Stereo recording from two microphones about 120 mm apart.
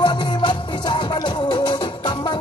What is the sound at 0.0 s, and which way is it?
Music, 40° left (ahead or behind).